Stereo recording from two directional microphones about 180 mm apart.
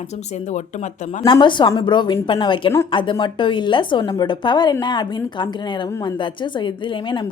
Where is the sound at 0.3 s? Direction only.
40° left (ahead or behind).